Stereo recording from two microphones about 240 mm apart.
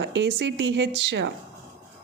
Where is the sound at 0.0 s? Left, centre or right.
Right.